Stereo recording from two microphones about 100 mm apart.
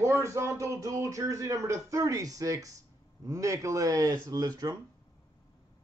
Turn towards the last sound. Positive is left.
turn(degrees=-40)  # may be behind; listen again after turning